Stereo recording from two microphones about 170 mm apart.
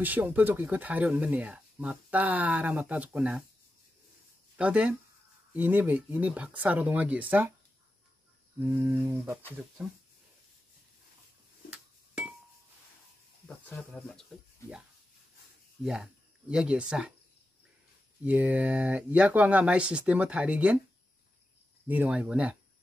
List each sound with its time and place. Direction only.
0.0 s speech: 10° right (ahead or behind)
4.6 s speech: 5° right (ahead or behind)
8.5 s speech: 15° right (ahead or behind)
13.7 s speech: 10° left (ahead or behind)
15.8 s speech: 5° right (ahead or behind)
18.2 s speech: 10° right (ahead or behind)
21.8 s speech: 10° right (ahead or behind)